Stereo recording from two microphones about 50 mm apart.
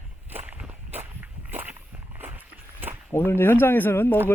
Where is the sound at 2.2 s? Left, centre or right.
Right.